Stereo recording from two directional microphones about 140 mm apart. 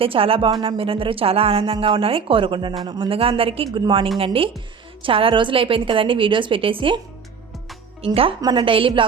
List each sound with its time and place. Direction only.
0.0 s speech: 40° right (ahead or behind)
8.0 s speech: 40° right (ahead or behind)